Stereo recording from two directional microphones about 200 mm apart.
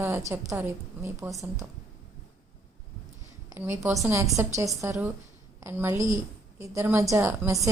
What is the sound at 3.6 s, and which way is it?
A woman's voice, 15° right (ahead or behind).